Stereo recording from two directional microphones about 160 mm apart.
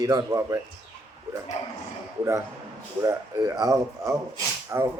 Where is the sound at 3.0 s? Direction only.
20° right (ahead or behind).